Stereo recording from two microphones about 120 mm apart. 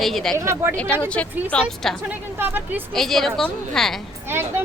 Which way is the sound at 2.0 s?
15° right (ahead or behind).